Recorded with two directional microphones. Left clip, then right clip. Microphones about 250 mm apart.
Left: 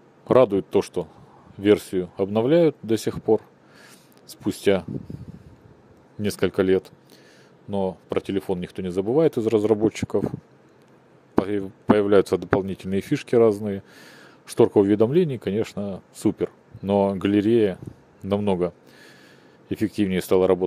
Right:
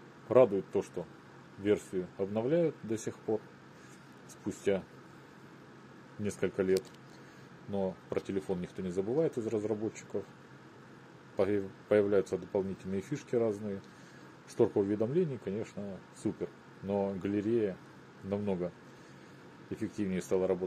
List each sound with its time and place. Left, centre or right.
0.3 s speech: left
4.5 s speech: left
6.2 s speech: left
11.4 s speech: left
19.7 s speech: left